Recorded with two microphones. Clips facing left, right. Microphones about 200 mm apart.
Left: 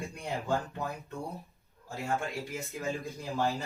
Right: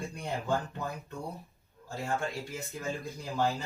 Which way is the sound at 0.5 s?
Centre (ahead or behind).